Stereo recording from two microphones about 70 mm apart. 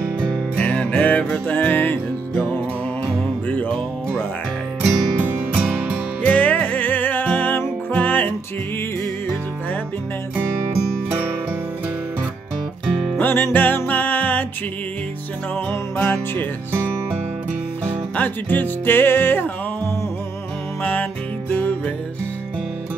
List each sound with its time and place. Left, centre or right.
0.6 s music: left
5.5 s music: centre
6.2 s music: left
13.2 s music: left
16.0 s music: left
18.1 s music: left
20.8 s music: left